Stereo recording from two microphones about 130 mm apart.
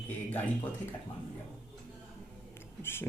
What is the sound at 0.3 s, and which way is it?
Speech, 15° left (ahead or behind).